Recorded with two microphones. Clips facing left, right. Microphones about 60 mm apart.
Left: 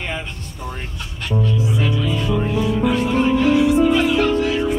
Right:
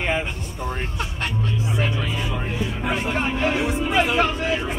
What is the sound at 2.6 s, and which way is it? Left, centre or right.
Music, right.